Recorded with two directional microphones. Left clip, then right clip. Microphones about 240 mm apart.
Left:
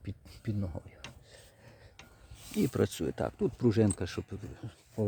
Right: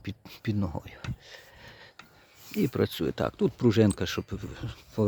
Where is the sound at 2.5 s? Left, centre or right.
Centre.